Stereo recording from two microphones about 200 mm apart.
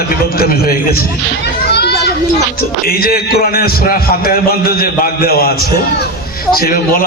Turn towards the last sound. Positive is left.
turn(degrees=45)  # may be behind; listen again after turning